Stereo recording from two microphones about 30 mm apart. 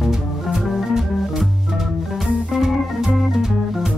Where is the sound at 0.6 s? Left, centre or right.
Centre.